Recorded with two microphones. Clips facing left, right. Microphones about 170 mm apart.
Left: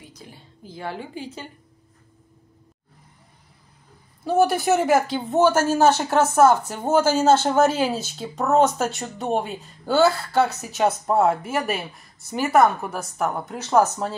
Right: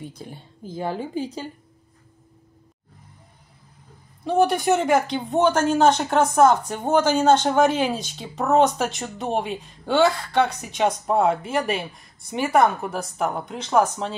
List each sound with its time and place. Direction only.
0.1 s a woman's voice: 50° right (ahead or behind)
4.2 s speech: 5° left (ahead or behind)